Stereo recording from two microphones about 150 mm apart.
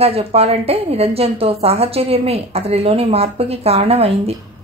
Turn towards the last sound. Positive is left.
turn(degrees=-40)  # may be behind; listen again after turning